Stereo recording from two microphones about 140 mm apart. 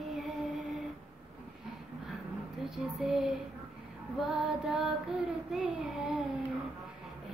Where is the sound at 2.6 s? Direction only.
5° right (ahead or behind).